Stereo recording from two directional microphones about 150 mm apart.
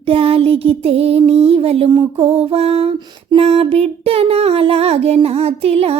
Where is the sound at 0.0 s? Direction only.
40° right (ahead or behind).